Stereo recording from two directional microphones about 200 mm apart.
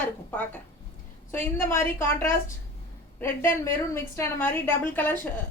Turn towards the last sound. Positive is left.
turn(degrees=10)  # may be behind; listen again after turning